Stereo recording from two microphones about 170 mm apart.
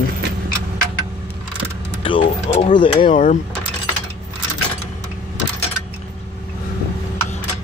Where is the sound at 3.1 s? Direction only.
45° left (ahead or behind).